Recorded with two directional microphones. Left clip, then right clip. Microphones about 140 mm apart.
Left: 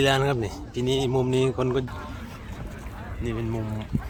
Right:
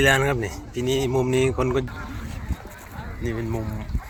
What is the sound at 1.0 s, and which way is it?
Speech, 30° left (ahead or behind).